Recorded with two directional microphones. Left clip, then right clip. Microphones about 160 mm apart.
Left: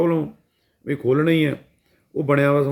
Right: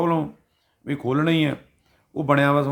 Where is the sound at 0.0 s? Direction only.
25° right (ahead or behind).